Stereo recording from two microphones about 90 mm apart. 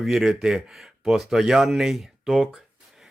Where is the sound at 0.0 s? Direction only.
5° right (ahead or behind).